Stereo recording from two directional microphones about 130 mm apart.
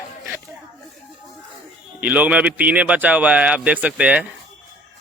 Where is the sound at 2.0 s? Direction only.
10° right (ahead or behind).